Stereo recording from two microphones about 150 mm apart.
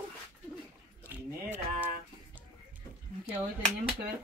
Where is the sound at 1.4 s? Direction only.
60° right (ahead or behind).